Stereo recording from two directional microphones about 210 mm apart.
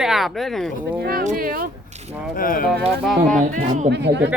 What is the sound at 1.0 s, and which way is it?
Speech, 40° right (ahead or behind).